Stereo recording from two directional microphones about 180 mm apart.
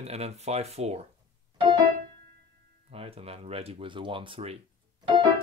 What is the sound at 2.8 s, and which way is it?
Speech, 35° right (ahead or behind).